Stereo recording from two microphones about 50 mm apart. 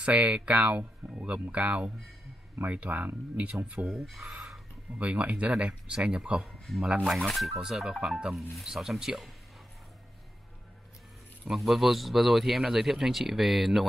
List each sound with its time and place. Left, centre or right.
0.0 s speech: right
3.8 s speech: centre
4.9 s speech: right
6.7 s speech: centre
11.5 s speech: centre